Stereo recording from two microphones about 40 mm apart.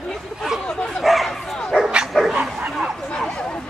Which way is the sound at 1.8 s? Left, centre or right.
Right.